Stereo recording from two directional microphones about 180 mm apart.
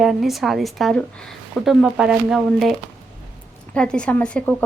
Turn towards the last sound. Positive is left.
turn(degrees=5)  # may be behind; listen again after turning